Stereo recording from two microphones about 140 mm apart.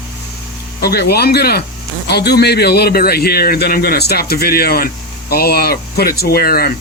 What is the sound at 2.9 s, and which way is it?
Speech, 90° left.